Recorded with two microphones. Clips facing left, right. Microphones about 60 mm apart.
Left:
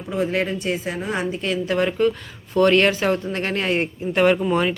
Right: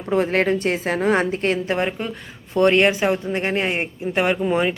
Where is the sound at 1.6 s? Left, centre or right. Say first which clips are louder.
Left 4 dB; right.